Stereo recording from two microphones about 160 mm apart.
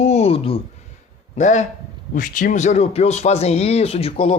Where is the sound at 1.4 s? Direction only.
50° left (ahead or behind).